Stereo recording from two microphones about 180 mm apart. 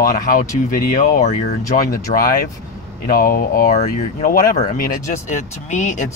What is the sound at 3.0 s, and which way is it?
Speech, 50° left (ahead or behind).